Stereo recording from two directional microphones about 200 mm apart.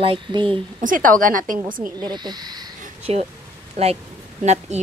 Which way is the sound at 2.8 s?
30° right (ahead or behind).